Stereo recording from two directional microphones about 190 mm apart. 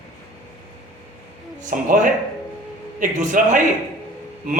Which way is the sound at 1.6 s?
45° right (ahead or behind).